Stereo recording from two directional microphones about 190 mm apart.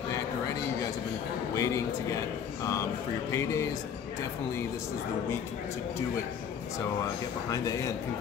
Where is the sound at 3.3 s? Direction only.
15° left (ahead or behind).